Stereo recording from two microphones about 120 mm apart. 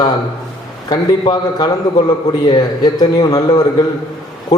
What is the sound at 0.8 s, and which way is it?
A man's voice, 35° left (ahead or behind).